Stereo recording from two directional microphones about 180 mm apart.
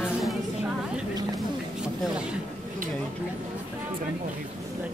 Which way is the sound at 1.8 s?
5° right (ahead or behind).